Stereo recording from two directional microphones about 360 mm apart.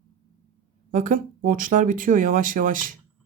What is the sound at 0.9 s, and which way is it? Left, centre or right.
Speech, right.